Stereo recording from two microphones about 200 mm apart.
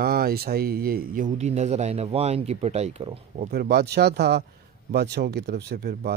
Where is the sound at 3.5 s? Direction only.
50° right (ahead or behind).